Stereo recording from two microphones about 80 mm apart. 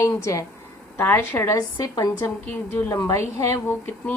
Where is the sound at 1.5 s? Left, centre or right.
Left.